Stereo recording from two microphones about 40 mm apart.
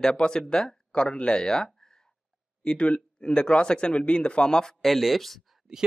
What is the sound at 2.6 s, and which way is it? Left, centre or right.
Speech, left.